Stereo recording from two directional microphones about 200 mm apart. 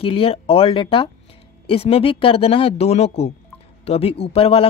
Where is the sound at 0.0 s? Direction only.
30° left (ahead or behind).